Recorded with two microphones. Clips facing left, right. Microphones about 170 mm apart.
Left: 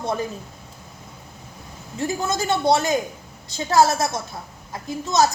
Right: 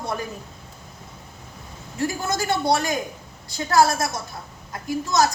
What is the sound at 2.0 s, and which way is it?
A woman's voice, 20° left (ahead or behind).